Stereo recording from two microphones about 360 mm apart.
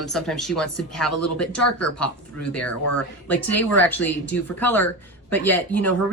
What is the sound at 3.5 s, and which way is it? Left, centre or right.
Speech, centre.